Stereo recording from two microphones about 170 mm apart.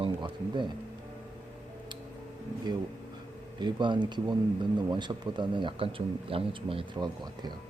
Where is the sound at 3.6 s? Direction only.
25° right (ahead or behind).